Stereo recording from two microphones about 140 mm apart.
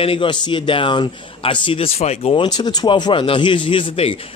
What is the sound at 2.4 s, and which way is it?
Speech, 30° left (ahead or behind).